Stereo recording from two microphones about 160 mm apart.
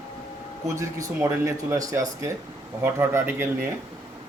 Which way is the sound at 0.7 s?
20° right (ahead or behind).